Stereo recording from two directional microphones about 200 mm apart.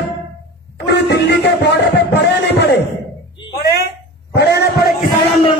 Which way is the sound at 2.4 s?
60° left (ahead or behind).